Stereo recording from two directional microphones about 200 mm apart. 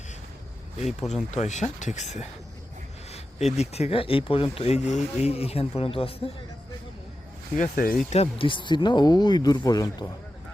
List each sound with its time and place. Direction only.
1.1 s speech: 35° left (ahead or behind)
7.5 s speech: 40° left (ahead or behind); by 10.1 s 20° left (ahead or behind)